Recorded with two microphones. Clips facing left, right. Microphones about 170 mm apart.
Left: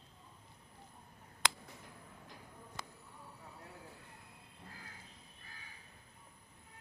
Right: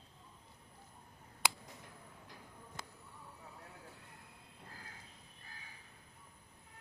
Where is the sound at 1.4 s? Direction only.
10° right (ahead or behind).